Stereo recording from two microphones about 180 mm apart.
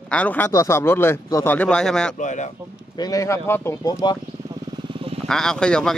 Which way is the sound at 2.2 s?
40° left (ahead or behind).